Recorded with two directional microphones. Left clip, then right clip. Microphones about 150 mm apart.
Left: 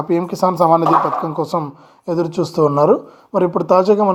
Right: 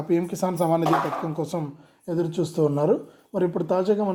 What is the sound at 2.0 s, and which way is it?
Speech, 15° left (ahead or behind).